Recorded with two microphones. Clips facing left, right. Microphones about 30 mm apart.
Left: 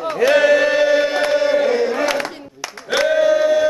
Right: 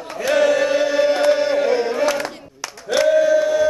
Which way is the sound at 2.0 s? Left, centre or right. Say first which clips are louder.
Even; left.